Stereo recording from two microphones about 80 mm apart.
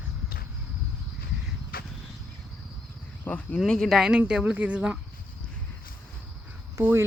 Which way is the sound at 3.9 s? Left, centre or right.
Centre.